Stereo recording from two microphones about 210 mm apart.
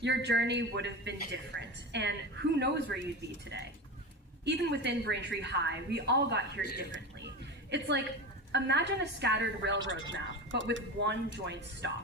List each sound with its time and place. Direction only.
0.0 s a woman's voice: 55° right (ahead or behind)
7.7 s a woman's voice: 55° right (ahead or behind)